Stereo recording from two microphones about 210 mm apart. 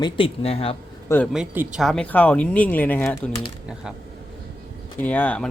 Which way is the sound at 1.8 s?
5° left (ahead or behind).